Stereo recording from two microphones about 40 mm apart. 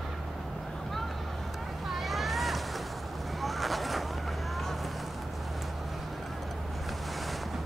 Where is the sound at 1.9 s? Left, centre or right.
Centre.